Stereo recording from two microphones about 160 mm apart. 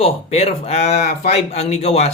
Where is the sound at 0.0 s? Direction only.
35° left (ahead or behind).